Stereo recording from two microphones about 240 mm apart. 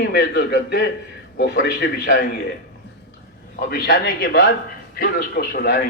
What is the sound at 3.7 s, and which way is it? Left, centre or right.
A man's voice, left.